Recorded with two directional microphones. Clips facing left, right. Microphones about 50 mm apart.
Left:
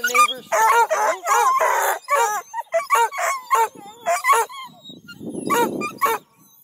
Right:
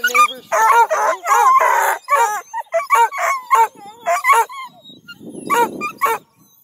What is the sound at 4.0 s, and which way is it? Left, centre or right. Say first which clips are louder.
Dog: right 4 dB; right.